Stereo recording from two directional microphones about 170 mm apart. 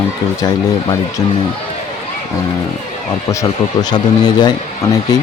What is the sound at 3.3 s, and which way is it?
Speech, 20° left (ahead or behind).